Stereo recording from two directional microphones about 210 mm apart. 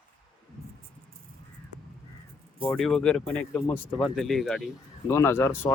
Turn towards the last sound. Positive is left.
turn(degrees=10)  # may be behind; listen again after turning